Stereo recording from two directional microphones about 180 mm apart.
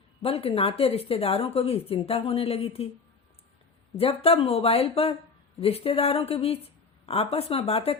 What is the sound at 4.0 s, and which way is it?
Speech, 35° left (ahead or behind).